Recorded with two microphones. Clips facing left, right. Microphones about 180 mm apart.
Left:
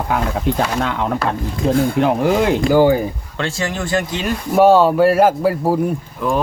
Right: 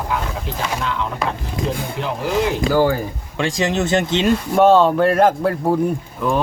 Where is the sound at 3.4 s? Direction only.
15° right (ahead or behind).